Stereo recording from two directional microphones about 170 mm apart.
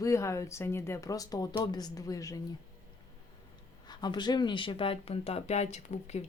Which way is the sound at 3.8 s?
25° left (ahead or behind).